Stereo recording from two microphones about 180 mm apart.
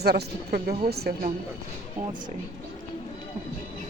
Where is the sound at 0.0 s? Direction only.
65° right (ahead or behind).